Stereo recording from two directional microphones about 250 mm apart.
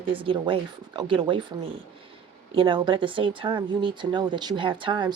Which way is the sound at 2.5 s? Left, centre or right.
Centre.